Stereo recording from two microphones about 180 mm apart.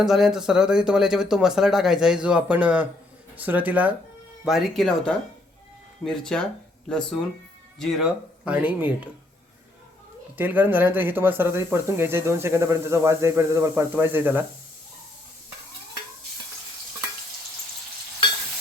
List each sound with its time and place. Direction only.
0.0 s speech: centre (ahead or behind)
10.3 s speech: 10° right (ahead or behind)